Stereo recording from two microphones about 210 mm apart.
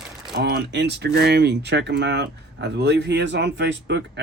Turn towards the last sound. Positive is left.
turn(degrees=-55)  # may be behind; listen again after turning